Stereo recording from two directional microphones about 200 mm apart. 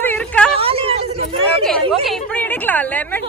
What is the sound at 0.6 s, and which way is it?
Hubbub, 30° right (ahead or behind).